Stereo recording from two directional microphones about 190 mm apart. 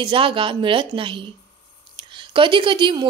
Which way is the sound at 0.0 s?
25° right (ahead or behind).